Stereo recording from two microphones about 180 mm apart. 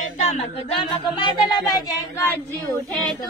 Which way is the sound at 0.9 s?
25° left (ahead or behind).